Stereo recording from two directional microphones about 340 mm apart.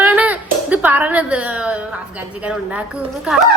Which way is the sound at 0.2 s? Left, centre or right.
Centre.